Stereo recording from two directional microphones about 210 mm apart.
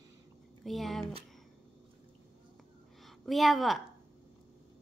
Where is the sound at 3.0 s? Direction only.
Centre (ahead or behind).